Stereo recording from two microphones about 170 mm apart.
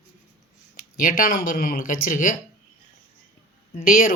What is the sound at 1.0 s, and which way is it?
Speech, 55° left (ahead or behind).